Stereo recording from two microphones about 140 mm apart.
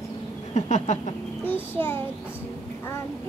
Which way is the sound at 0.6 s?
55° left (ahead or behind).